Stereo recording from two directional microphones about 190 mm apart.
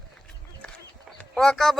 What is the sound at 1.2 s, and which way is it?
Speech, 5° left (ahead or behind).